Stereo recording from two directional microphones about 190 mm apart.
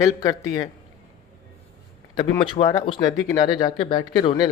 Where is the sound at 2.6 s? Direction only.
25° left (ahead or behind).